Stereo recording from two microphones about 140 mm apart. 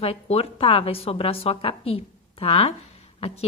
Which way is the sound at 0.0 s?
45° left (ahead or behind).